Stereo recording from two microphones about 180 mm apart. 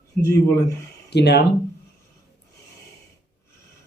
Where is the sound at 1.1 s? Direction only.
70° left (ahead or behind).